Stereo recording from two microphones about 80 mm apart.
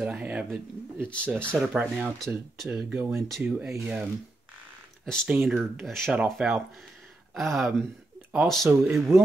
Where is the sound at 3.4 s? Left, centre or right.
Centre.